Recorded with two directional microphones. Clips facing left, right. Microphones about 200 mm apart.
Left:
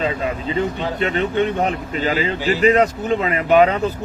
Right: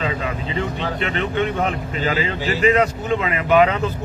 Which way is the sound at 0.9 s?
40° left (ahead or behind).